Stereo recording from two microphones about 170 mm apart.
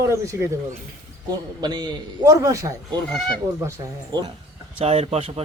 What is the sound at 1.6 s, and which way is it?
Speech, 25° right (ahead or behind).